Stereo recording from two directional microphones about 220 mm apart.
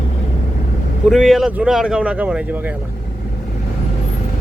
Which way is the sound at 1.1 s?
Centre (ahead or behind).